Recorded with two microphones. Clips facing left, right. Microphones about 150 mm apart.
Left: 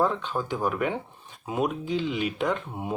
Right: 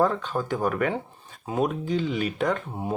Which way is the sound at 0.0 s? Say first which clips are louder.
Right 2 dB; 45° right (ahead or behind).